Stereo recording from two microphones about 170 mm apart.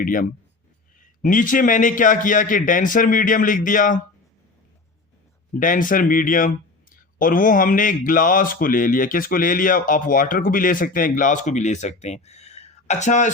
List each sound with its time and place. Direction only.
0.0 s speech: 55° left (ahead or behind)
5.5 s speech: 50° left (ahead or behind)